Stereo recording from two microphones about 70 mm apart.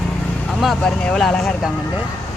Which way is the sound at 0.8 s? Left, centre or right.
Centre.